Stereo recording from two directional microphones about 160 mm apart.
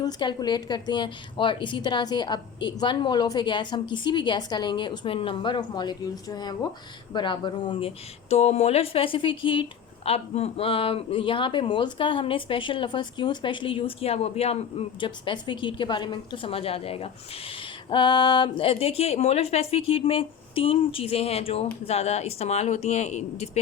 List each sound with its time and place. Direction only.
0.0 s a woman's voice: 25° left (ahead or behind); by 23.5 s 45° left (ahead or behind)